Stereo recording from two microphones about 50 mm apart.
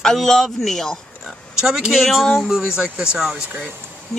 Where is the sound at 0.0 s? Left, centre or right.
Centre.